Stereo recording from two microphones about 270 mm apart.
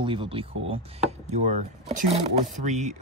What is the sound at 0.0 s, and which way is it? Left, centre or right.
Speech, centre.